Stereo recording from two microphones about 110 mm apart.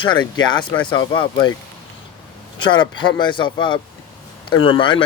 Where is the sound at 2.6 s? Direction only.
45° left (ahead or behind).